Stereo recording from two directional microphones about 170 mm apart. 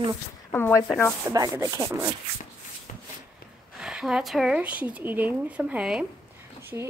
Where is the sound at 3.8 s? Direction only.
5° right (ahead or behind).